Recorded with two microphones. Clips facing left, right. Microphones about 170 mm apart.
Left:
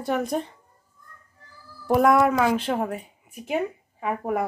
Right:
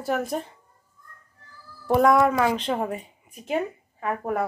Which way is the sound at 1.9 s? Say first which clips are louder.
Even; centre (ahead or behind).